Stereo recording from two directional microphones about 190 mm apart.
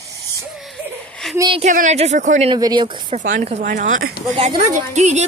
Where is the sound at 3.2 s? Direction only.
40° right (ahead or behind).